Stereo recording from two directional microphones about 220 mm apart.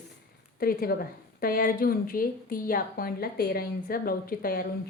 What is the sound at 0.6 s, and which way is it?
A woman's voice, 45° left (ahead or behind).